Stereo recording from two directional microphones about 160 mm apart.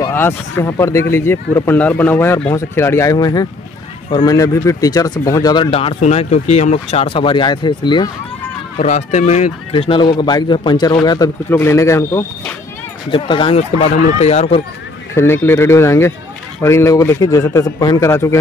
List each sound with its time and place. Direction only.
0.0 s speech: 15° left (ahead or behind)
8.7 s speech: 45° left (ahead or behind); by 12.3 s 20° left (ahead or behind)
13.1 s speech: 35° left (ahead or behind)
15.1 s speech: 15° left (ahead or behind)